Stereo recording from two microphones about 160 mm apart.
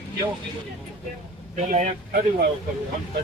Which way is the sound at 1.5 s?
45° right (ahead or behind).